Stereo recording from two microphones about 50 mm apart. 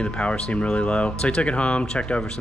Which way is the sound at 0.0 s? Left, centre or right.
Left.